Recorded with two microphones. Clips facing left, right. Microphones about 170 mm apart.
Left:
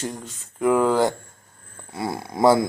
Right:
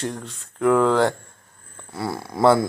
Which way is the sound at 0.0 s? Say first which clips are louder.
Right 2 dB; centre (ahead or behind).